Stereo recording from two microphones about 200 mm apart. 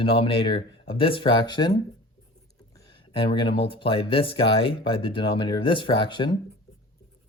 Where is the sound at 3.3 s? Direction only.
25° left (ahead or behind).